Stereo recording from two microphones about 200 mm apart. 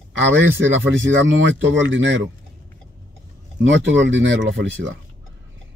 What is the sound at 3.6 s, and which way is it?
Speech, 70° right (ahead or behind).